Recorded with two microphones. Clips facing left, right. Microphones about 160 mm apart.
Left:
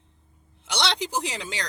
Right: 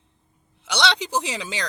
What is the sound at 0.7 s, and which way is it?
Speech, 65° right (ahead or behind).